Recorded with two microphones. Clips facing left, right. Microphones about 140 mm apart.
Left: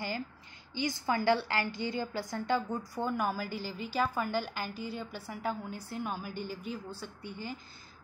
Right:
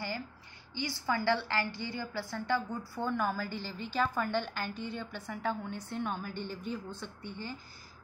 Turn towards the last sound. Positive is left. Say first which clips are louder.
# left 1 dB
turn(degrees=10)  # may be behind; listen again after turning